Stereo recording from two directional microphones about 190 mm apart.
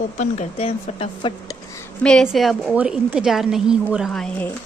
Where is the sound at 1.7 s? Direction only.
5° left (ahead or behind).